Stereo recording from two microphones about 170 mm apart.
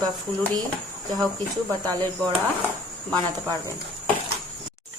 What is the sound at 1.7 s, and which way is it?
Speech, 20° right (ahead or behind).